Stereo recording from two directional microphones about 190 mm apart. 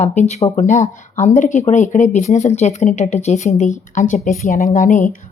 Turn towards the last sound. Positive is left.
turn(degrees=45)  # may be behind; listen again after turning